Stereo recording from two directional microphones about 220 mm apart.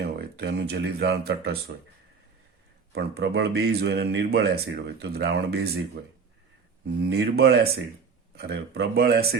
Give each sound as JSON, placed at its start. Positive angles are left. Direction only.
{"t": 0.0, "sound": "speech", "side_deg": -50}
{"t": 2.9, "sound": "speech", "side_deg": -50}